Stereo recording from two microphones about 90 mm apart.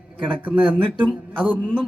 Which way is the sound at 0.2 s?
15° right (ahead or behind).